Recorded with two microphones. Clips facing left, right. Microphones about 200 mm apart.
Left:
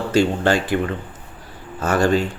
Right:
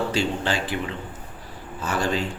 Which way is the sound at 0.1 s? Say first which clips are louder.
Left 8 dB; 50° left (ahead or behind).